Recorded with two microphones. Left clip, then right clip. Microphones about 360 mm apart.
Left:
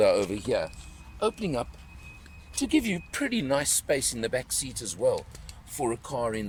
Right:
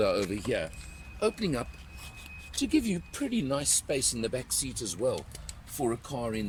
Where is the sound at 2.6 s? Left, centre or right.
Centre.